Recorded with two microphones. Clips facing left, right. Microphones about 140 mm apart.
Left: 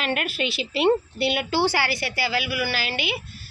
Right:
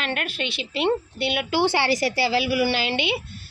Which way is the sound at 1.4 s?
15° right (ahead or behind).